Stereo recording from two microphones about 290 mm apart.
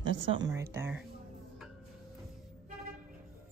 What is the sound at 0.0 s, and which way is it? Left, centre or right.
Speech, right.